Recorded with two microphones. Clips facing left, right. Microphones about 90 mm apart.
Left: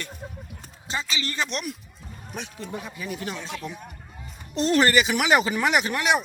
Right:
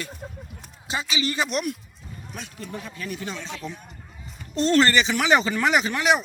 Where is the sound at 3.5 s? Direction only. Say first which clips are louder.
Even; 5° left (ahead or behind).